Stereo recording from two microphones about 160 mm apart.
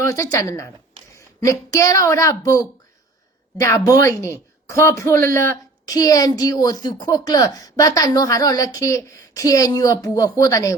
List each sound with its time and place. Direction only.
0.0 s speech: 20° left (ahead or behind)